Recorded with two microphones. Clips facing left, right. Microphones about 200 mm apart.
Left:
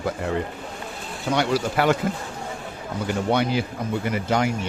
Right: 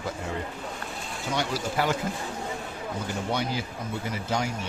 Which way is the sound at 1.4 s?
70° left (ahead or behind).